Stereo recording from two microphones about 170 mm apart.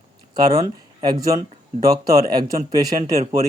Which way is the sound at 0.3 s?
20° right (ahead or behind).